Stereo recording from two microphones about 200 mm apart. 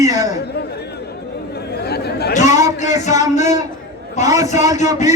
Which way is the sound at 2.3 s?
35° left (ahead or behind).